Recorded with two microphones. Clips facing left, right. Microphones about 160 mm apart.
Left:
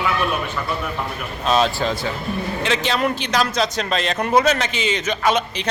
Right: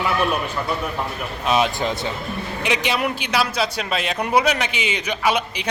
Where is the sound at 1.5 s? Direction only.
15° right (ahead or behind).